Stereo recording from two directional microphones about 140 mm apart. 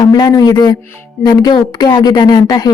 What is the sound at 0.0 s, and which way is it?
A woman's voice, 30° left (ahead or behind).